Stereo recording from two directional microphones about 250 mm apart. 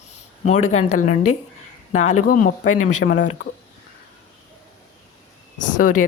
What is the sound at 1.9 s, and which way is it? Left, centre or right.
A woman's voice, left.